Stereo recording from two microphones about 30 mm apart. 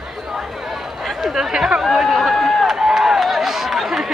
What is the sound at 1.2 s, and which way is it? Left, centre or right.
Speech, centre.